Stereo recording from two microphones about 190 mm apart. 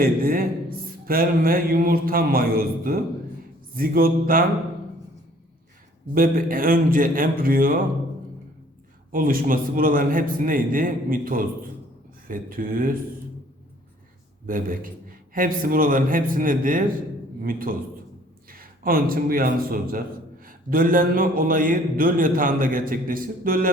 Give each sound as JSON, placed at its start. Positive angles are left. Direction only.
{"t": 0.0, "sound": "mantra", "side_deg": -50}
{"t": 6.1, "sound": "mantra", "side_deg": -50}
{"t": 9.1, "sound": "mantra", "side_deg": -45}
{"t": 14.4, "sound": "mantra", "side_deg": -45}
{"t": 18.5, "sound": "a man's voice", "side_deg": -50}
{"t": 20.4, "sound": "mantra", "side_deg": -50}